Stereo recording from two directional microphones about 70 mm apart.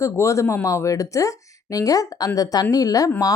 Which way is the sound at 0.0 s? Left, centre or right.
Left.